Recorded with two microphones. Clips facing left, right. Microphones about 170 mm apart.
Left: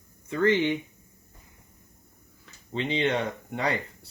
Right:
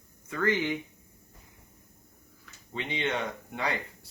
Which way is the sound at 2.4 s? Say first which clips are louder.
Left 6 dB; 30° left (ahead or behind).